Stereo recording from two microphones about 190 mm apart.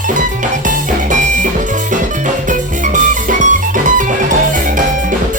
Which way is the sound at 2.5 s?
40° right (ahead or behind).